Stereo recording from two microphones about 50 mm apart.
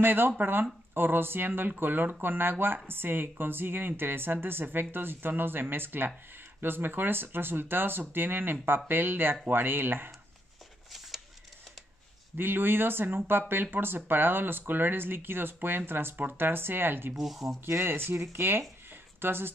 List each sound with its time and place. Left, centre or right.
0.0 s speech: right
12.4 s speech: right
17.1 s speech: centre
17.6 s speech: right